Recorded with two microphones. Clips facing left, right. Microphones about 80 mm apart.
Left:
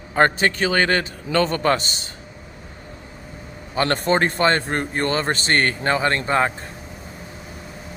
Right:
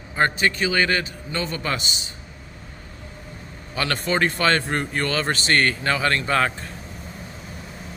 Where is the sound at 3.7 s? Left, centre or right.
Left.